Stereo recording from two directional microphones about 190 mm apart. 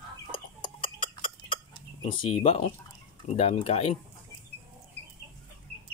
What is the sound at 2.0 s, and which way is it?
Speech, 25° left (ahead or behind).